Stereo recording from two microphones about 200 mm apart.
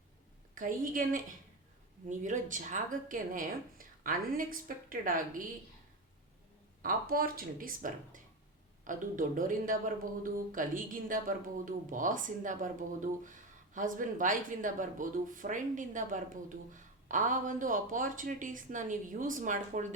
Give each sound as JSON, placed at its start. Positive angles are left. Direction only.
{"t": 0.5, "sound": "speech", "side_deg": -40}
{"t": 6.8, "sound": "speech", "side_deg": -45}
{"t": 13.7, "sound": "speech", "side_deg": -40}